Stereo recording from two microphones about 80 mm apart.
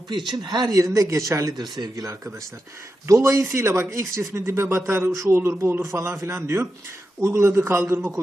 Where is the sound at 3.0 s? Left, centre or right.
Right.